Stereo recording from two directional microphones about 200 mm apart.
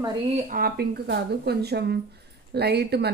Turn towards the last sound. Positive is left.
turn(degrees=-55)  # may be behind; listen again after turning